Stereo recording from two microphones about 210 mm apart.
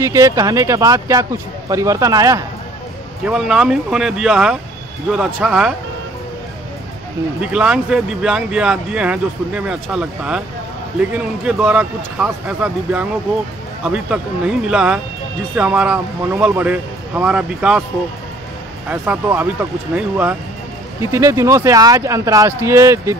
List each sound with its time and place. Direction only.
0.0 s speech: 15° right (ahead or behind)
3.3 s speech: 5° right (ahead or behind)
7.4 s speech: 5° right (ahead or behind)
18.9 s speech: 10° right (ahead or behind)